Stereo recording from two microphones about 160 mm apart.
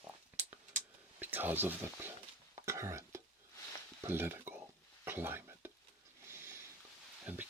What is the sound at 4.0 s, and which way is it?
Speech, 15° right (ahead or behind).